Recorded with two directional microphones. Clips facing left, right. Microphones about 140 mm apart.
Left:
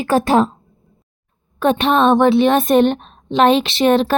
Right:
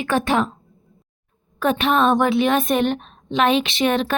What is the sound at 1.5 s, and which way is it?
A woman's voice, 30° left (ahead or behind).